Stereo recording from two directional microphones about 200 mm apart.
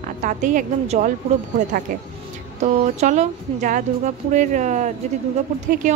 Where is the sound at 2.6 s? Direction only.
35° right (ahead or behind).